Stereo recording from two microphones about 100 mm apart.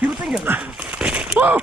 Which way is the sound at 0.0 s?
10° right (ahead or behind).